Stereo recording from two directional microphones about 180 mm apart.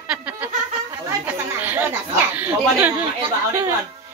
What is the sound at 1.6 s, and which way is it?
Chatter, 10° right (ahead or behind).